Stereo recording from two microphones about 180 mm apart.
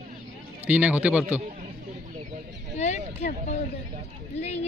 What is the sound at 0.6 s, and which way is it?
Speech, 5° right (ahead or behind).